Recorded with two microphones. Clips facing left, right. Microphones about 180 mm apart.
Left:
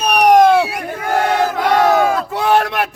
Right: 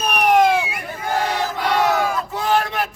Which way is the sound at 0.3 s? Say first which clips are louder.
Left 6 dB; 75° left (ahead or behind).